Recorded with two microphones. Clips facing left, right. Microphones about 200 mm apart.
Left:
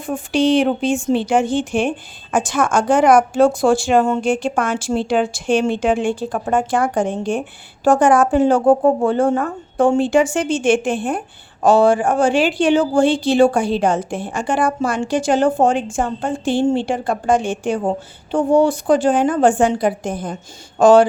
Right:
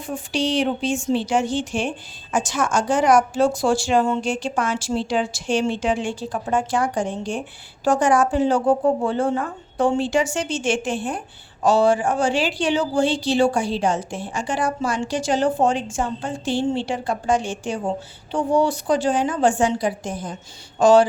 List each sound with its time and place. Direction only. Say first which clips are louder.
0.0 s a woman's voice: left 7 dB; 55° left (ahead or behind)